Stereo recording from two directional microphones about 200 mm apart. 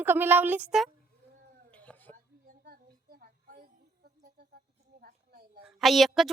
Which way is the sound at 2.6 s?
45° right (ahead or behind).